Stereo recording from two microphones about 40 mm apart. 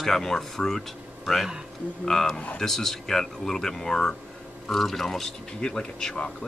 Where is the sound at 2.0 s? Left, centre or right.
Centre.